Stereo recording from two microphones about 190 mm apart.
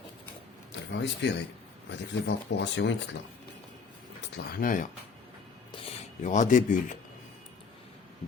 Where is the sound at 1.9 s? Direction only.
65° left (ahead or behind).